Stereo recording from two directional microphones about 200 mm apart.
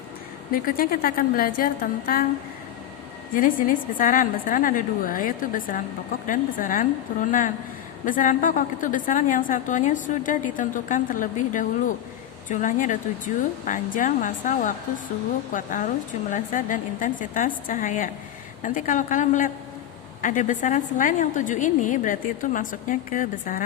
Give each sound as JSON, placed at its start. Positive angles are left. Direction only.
{"t": 0.5, "sound": "a woman's voice", "side_deg": 45}
{"t": 3.3, "sound": "a woman's voice", "side_deg": 40}